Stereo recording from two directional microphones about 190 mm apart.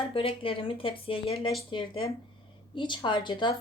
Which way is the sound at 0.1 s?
30° left (ahead or behind).